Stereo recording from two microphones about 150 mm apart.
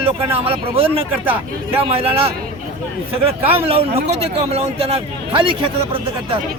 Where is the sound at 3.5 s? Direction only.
40° right (ahead or behind).